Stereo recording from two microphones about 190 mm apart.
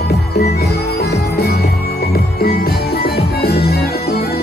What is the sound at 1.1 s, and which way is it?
Jingle bell, 55° left (ahead or behind).